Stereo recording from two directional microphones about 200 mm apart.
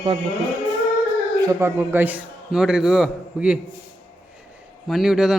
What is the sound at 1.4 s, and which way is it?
A man's voice, 15° right (ahead or behind).